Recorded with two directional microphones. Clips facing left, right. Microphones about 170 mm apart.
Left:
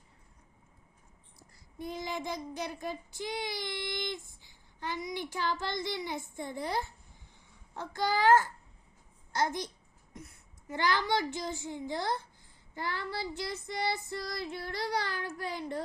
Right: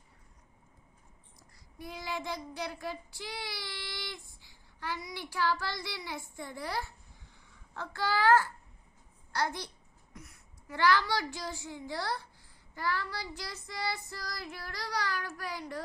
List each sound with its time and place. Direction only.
1.4 s child singing: 20° left (ahead or behind)
7.7 s a child's voice: 15° left (ahead or behind)
10.2 s child singing: 20° left (ahead or behind)